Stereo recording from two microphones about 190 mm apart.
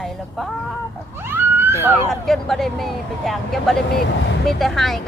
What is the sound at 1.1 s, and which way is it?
Speech, 10° right (ahead or behind).